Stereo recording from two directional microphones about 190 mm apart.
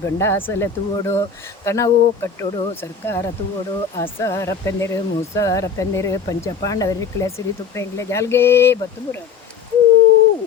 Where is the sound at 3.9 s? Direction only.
15° left (ahead or behind).